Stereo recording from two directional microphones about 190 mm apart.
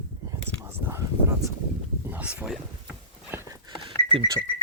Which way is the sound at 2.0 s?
10° right (ahead or behind).